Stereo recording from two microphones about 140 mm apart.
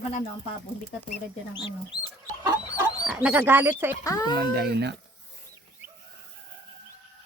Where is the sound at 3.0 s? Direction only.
10° right (ahead or behind).